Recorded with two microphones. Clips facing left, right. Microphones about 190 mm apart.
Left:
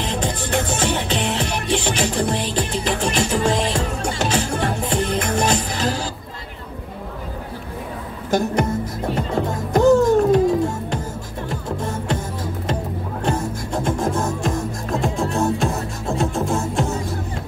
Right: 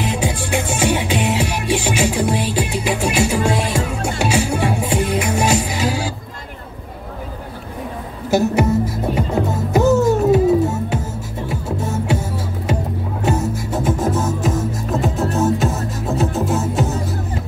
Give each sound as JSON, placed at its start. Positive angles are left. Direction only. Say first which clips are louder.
{"t": 0.0, "sound": "music", "louder": "right 3 dB", "side_deg": -10}
{"t": 8.3, "sound": "music", "louder": "right 4 dB", "side_deg": -5}